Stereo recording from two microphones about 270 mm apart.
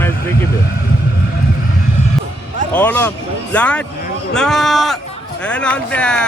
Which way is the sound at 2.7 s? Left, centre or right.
Centre.